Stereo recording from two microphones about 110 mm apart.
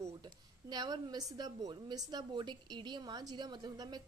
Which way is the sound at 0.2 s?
40° right (ahead or behind).